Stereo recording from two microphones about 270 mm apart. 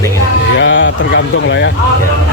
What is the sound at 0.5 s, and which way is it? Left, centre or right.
Speech, left.